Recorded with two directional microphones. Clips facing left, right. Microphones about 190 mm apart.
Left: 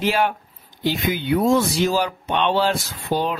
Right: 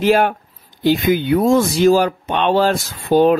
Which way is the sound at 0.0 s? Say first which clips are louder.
Right 6 dB; 50° right (ahead or behind).